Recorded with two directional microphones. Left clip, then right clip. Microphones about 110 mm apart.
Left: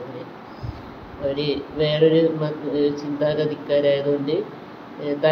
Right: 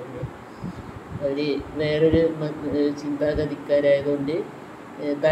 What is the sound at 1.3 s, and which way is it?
Speech, 30° left (ahead or behind).